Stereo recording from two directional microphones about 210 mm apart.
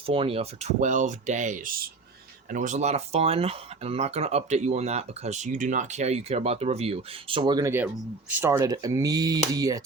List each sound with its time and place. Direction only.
0.0 s speech: 25° right (ahead or behind)